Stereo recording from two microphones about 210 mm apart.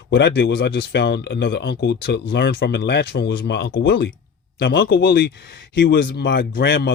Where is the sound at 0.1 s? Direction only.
55° left (ahead or behind).